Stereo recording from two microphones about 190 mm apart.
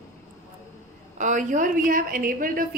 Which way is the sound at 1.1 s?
40° right (ahead or behind).